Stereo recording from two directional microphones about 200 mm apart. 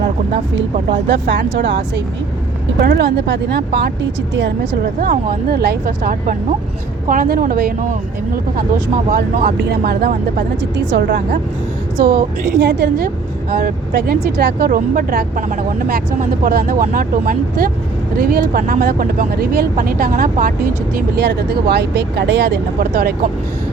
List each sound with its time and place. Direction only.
1.0 s speech: 65° right (ahead or behind)
2.8 s speech: 50° right (ahead or behind)
4.9 s speech: 50° right (ahead or behind)
9.1 s speech: 50° right (ahead or behind)
10.9 s speech: 65° right (ahead or behind)
11.9 s speech: 40° right (ahead or behind)
12.5 s speech: 60° right (ahead or behind)
13.5 s speech: 45° right (ahead or behind)
21.2 s speech: 55° right (ahead or behind)